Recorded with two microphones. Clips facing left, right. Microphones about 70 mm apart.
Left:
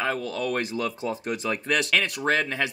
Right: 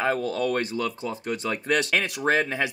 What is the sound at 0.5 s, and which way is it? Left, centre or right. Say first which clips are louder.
Speech: right 1 dB; centre.